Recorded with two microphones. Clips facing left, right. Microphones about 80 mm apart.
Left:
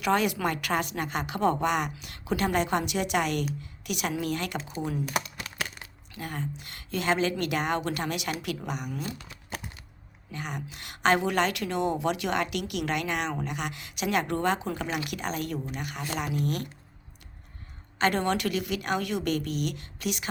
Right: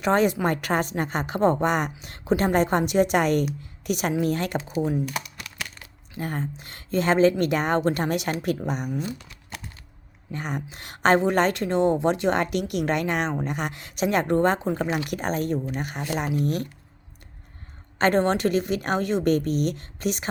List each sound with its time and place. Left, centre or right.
0.0 s a woman's voice: right
4.7 s speech: right
5.0 s a sound: left
6.1 s a woman's voice: right
10.3 s a woman's voice: right
14.9 s a woman's voice: right
17.9 s a woman's voice: right